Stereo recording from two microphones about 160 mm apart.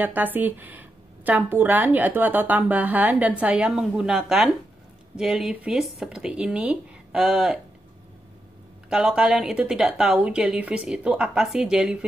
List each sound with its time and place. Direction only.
0.0 s a woman's voice: 10° right (ahead or behind)
8.9 s a woman's voice: 5° right (ahead or behind)